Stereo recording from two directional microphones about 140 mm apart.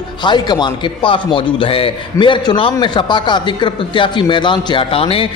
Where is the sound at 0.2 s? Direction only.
35° left (ahead or behind).